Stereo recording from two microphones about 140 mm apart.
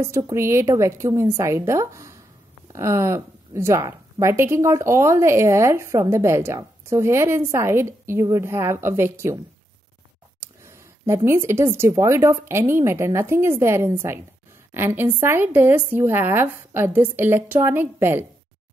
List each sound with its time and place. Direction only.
0.0 s a woman's voice: 20° right (ahead or behind)
10.4 s a sound: 20° right (ahead or behind)
11.2 s speech: 20° right (ahead or behind)